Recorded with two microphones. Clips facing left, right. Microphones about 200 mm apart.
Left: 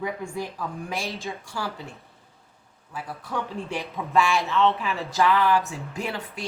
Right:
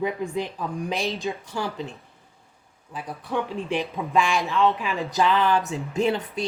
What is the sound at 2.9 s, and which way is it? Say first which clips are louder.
Speech: right 3 dB; 20° right (ahead or behind).